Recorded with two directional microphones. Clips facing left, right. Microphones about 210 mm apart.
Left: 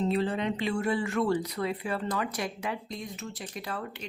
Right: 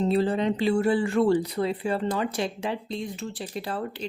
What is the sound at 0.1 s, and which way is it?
Speech, 35° right (ahead or behind).